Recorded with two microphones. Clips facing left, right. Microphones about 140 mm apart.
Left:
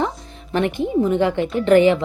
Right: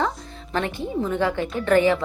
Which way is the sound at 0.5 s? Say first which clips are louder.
Left 6 dB; 20° left (ahead or behind).